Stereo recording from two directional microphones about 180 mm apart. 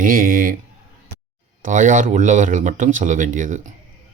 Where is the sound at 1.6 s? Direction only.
45° right (ahead or behind).